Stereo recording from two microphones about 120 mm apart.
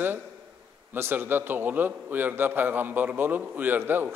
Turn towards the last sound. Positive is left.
turn(degrees=-15)  # may be behind; listen again after turning